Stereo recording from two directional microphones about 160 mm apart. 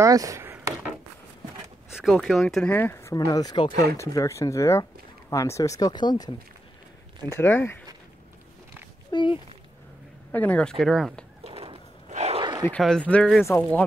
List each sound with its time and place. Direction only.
0.0 s chop: 20° right (ahead or behind)
1.9 s speech: centre (ahead or behind)
2.7 s speech: 15° left (ahead or behind)
7.3 s speech: 15° left (ahead or behind)
9.1 s speech: 30° left (ahead or behind)
10.3 s speech: 10° left (ahead or behind)
10.8 s speech: centre (ahead or behind)
11.4 s a sound: 40° right (ahead or behind)
12.4 s bow-wow: 30° right (ahead or behind)
12.7 s speech: 5° left (ahead or behind)
13.5 s speech: 15° left (ahead or behind)